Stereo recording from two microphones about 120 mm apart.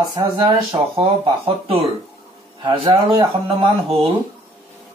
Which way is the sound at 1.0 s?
50° right (ahead or behind).